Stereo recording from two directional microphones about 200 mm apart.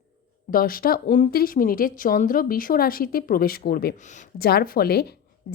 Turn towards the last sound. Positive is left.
turn(degrees=50)  # may be behind; listen again after turning